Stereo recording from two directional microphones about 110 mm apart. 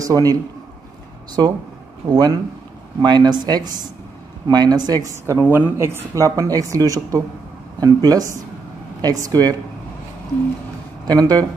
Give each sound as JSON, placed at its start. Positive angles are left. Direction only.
{"t": 0.0, "sound": "a man's voice", "side_deg": -35}
{"t": 2.0, "sound": "speech", "side_deg": -40}
{"t": 5.2, "sound": "speech", "side_deg": -20}
{"t": 11.1, "sound": "speech", "side_deg": -35}